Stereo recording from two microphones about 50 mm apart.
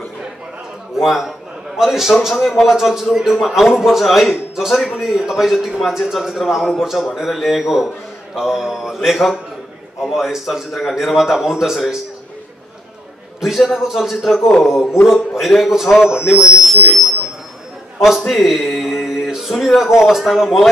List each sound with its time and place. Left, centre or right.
0.9 s a man's voice: centre
13.4 s a man's voice: centre
18.4 s speech: centre